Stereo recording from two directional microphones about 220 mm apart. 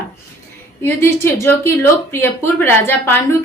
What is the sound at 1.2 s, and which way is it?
A woman's voice, 10° left (ahead or behind).